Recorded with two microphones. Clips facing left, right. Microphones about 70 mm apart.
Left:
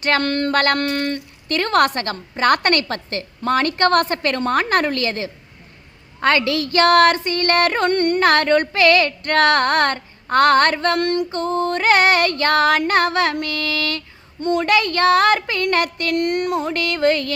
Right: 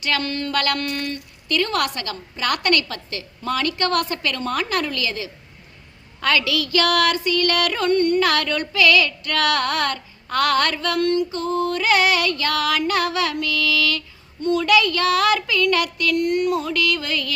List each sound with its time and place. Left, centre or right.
0.0 s a woman's voice: left
7.9 s female singing: left
8.2 s a woman's voice: left
11.0 s female singing: left
14.4 s a woman's voice: left
16.1 s a woman's voice: left